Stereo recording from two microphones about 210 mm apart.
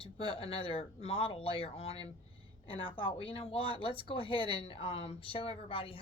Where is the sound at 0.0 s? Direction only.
25° left (ahead or behind).